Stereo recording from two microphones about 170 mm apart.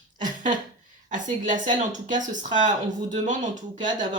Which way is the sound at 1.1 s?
50° right (ahead or behind).